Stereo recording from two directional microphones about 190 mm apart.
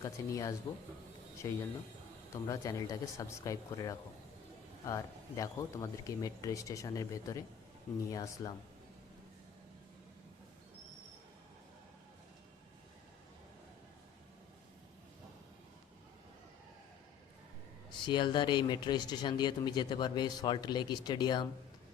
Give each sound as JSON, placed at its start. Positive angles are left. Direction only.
{"t": 0.0, "sound": "speech", "side_deg": 15}
{"t": 5.4, "sound": "speech", "side_deg": 15}
{"t": 18.0, "sound": "speech", "side_deg": 25}